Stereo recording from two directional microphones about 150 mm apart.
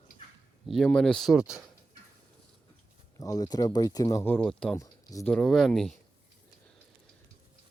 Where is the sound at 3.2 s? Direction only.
25° left (ahead or behind); by 4.8 s 5° left (ahead or behind).